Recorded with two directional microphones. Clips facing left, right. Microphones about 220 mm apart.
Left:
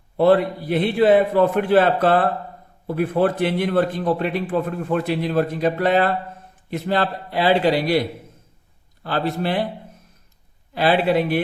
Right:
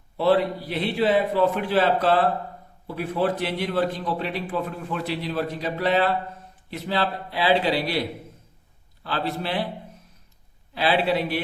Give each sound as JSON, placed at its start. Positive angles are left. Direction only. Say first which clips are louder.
{"t": 0.2, "sound": "a man's voice", "louder": "left 4 dB", "side_deg": 50}
{"t": 9.0, "sound": "a man's voice", "louder": "left 5 dB", "side_deg": 50}
{"t": 10.8, "sound": "a man's voice", "louder": "left 4 dB", "side_deg": 50}